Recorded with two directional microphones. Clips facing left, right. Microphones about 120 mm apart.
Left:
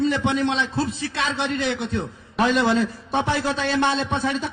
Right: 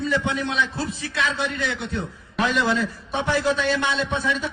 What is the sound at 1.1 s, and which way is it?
Speech, 50° left (ahead or behind).